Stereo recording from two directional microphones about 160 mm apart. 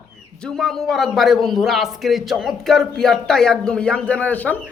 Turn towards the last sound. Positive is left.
turn(degrees=10)  # may be behind; listen again after turning